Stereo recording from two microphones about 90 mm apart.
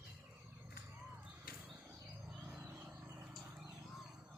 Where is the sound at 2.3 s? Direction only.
5° right (ahead or behind).